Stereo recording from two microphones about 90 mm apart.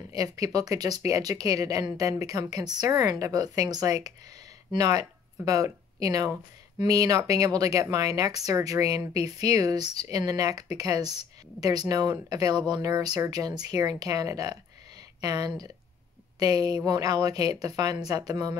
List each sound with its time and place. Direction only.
0.1 s speech: 45° right (ahead or behind)